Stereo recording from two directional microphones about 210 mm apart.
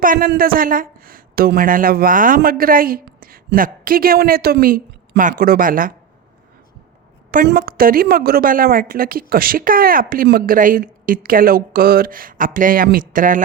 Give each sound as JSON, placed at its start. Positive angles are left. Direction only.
{"t": 0.0, "sound": "speech", "side_deg": -40}
{"t": 7.3, "sound": "a woman's voice", "side_deg": -45}